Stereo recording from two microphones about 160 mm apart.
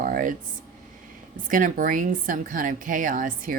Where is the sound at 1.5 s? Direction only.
55° right (ahead or behind).